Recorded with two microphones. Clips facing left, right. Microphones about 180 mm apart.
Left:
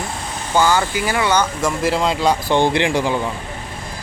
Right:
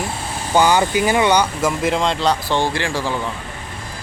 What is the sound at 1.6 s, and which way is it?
Speech, centre (ahead or behind).